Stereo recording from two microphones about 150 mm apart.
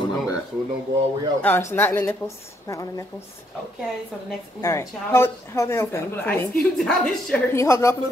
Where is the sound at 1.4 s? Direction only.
15° left (ahead or behind).